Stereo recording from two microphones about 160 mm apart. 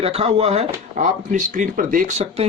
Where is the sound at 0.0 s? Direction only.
40° right (ahead or behind).